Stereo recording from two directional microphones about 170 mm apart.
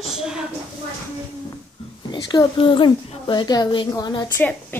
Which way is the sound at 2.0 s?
30° left (ahead or behind).